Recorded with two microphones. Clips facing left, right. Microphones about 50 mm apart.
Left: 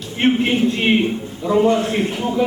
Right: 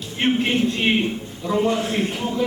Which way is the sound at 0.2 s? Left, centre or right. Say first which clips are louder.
Left 4 dB; centre.